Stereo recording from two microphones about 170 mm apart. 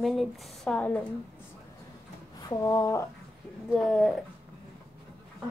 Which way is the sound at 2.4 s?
20° left (ahead or behind).